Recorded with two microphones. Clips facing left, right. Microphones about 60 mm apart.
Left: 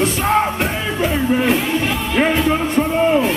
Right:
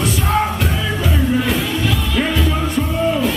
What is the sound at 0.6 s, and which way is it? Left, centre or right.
Music, left.